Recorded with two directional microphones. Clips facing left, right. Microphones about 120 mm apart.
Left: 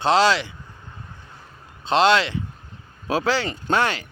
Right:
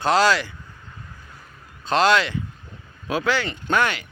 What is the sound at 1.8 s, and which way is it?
Speech, 25° left (ahead or behind).